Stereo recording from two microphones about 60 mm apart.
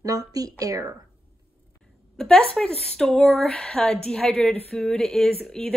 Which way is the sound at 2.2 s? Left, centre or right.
Centre.